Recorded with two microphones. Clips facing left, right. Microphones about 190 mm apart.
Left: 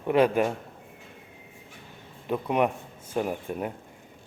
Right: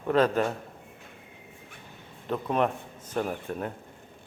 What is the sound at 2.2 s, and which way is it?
Speech, 10° left (ahead or behind).